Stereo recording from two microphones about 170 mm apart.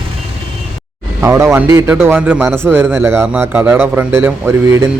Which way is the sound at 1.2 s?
15° right (ahead or behind).